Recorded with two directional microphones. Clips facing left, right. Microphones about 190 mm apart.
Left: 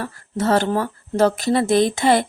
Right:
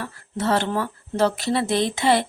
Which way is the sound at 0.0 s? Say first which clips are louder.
Left 3 dB; 40° left (ahead or behind).